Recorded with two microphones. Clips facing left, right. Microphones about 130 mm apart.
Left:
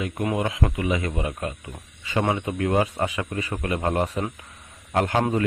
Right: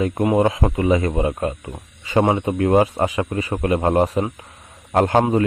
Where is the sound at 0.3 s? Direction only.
35° right (ahead or behind).